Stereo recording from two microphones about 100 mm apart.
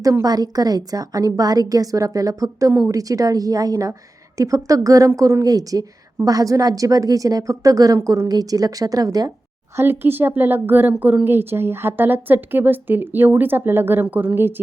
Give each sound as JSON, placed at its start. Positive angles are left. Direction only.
{"t": 0.0, "sound": "a woman's voice", "side_deg": -35}
{"t": 9.7, "sound": "speech", "side_deg": -20}